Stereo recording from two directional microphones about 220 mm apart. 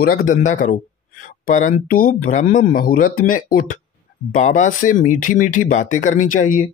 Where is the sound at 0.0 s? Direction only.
40° left (ahead or behind).